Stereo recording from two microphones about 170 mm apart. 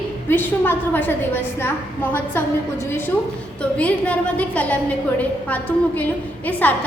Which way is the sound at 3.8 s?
10° left (ahead or behind).